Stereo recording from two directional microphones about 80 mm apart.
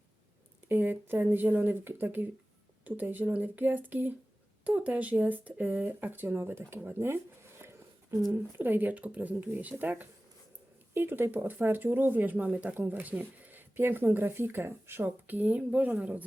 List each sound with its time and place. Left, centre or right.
0.7 s speech: right